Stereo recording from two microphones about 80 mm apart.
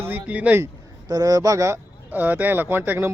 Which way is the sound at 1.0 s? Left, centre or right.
Right.